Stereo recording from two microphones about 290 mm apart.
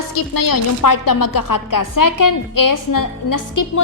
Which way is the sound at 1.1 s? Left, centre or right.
Left.